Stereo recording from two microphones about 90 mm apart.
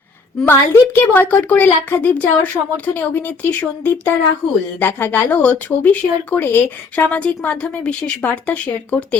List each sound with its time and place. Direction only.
0.4 s a woman's voice: 25° left (ahead or behind)